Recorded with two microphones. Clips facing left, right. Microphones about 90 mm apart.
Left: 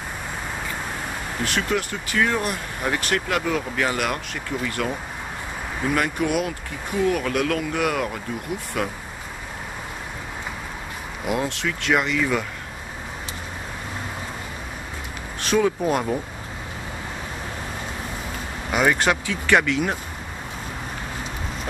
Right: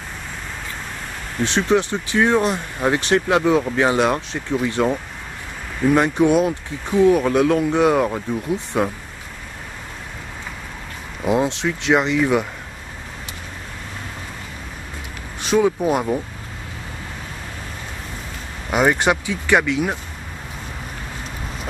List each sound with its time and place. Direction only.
1.4 s speech: 25° right (ahead or behind)
5.9 s speech: 25° right (ahead or behind)
11.2 s speech: 20° right (ahead or behind)
15.4 s speech: 10° right (ahead or behind)
18.7 s speech: 15° right (ahead or behind)